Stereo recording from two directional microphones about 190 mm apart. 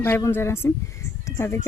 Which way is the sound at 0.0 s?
10° left (ahead or behind).